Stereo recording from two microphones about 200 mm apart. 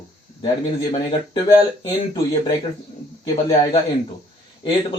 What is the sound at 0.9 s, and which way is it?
Speech, 20° left (ahead or behind).